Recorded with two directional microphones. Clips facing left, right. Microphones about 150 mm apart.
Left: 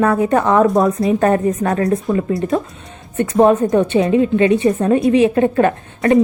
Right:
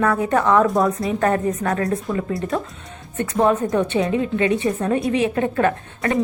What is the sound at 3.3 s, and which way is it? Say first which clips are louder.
A woman's voice: left 6 dB; 25° left (ahead or behind).